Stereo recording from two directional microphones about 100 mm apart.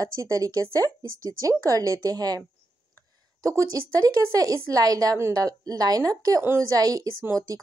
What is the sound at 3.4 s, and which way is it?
Speech, 35° right (ahead or behind).